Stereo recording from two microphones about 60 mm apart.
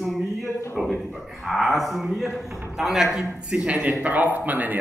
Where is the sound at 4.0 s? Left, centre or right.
Right.